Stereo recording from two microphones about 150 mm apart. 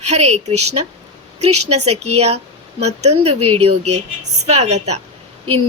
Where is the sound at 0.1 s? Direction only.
45° right (ahead or behind).